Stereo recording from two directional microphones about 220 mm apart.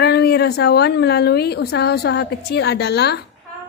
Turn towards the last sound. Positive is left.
turn(degrees=50)  # may be behind; listen again after turning